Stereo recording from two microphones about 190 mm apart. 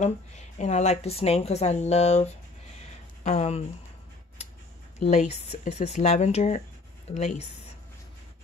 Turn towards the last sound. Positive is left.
turn(degrees=35)  # may be behind; listen again after turning